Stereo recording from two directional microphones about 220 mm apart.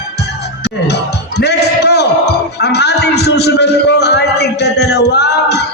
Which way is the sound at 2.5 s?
50° left (ahead or behind).